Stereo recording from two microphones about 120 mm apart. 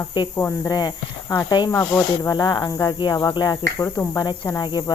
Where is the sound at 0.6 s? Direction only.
35° left (ahead or behind).